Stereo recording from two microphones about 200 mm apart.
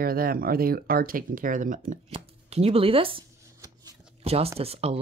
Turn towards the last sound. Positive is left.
turn(degrees=-30)  # may be behind; listen again after turning